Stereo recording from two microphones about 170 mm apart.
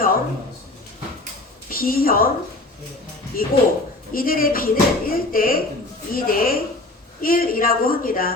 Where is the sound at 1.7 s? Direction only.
60° left (ahead or behind).